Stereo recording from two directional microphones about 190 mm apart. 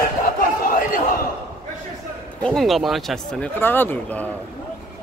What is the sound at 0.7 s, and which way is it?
Crowd, 45° left (ahead or behind).